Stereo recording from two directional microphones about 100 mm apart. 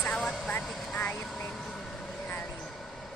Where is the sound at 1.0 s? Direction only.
20° left (ahead or behind).